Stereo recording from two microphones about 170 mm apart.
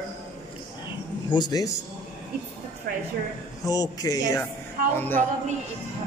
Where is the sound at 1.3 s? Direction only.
25° left (ahead or behind).